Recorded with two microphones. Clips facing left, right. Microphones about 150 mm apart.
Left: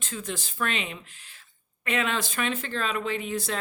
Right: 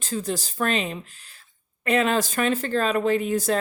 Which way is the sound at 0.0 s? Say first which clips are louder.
Right 7 dB; 35° right (ahead or behind).